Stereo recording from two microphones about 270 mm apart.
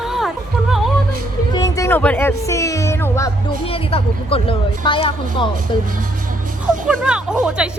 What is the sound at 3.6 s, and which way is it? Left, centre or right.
Speech, left.